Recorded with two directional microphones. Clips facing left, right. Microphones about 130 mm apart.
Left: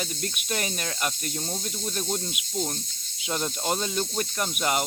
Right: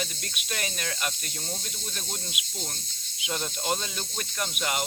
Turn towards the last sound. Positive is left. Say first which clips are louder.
# left 4 dB
turn(degrees=40)  # may be behind; listen again after turning